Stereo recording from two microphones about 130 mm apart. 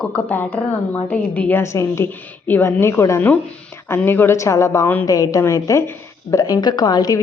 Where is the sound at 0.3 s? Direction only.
10° left (ahead or behind).